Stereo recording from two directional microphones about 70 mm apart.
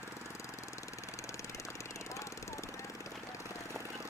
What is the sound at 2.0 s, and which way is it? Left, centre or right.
Vehicle, left.